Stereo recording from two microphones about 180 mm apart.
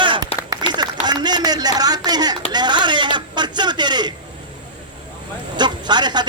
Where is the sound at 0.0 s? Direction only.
25° right (ahead or behind).